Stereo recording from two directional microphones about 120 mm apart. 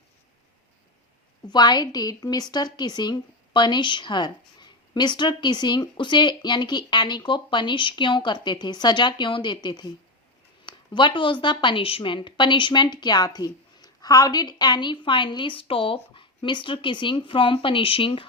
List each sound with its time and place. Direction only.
1.5 s a woman's voice: 35° left (ahead or behind)